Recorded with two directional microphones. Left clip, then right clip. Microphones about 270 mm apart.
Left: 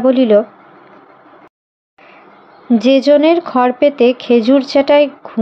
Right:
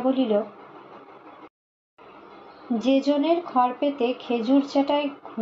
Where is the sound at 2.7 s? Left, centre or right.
Left.